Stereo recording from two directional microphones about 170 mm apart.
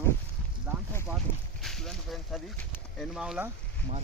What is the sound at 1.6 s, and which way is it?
Speech, centre (ahead or behind).